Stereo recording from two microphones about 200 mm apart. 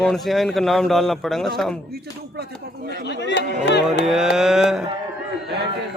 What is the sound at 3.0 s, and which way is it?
Speech, 60° left (ahead or behind).